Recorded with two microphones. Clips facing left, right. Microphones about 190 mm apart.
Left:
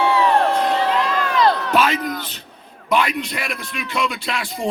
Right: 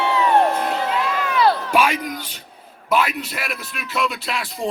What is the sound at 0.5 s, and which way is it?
Crowd, 5° right (ahead or behind).